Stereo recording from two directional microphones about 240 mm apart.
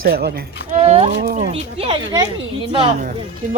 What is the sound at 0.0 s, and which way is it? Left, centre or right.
Speech, right.